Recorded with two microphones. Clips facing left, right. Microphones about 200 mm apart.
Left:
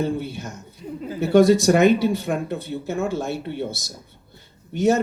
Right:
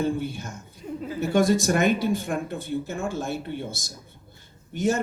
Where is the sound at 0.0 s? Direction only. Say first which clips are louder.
Left 1 dB; 50° right (ahead or behind).